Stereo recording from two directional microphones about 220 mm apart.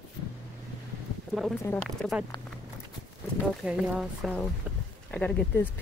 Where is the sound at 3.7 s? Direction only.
5° right (ahead or behind).